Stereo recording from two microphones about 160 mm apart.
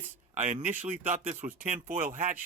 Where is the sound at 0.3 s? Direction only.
50° right (ahead or behind).